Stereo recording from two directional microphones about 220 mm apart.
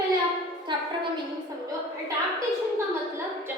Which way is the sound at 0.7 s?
20° right (ahead or behind).